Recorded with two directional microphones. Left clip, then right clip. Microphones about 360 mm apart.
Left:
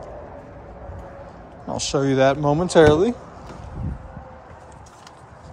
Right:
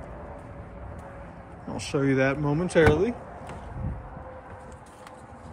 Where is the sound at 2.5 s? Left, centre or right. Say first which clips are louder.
Left 5 dB; left.